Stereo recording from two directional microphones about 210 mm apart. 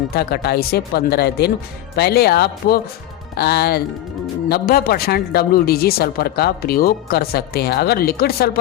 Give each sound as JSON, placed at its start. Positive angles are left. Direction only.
{"t": 0.1, "sound": "speech", "side_deg": 50}